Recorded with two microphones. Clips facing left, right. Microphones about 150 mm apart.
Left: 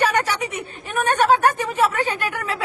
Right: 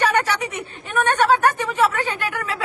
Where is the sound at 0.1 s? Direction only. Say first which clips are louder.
Right 1 dB; 15° left (ahead or behind).